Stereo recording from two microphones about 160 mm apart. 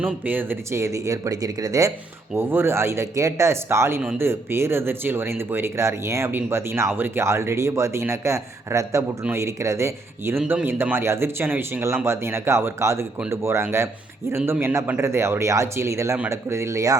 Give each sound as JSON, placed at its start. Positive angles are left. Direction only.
{"t": 0.0, "sound": "speech", "side_deg": -10}